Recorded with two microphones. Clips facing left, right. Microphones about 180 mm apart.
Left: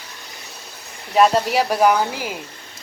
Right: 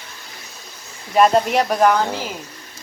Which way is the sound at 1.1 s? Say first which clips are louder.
Right 1 dB; 5° left (ahead or behind).